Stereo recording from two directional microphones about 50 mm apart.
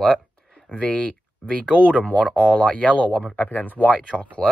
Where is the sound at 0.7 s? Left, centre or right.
Left.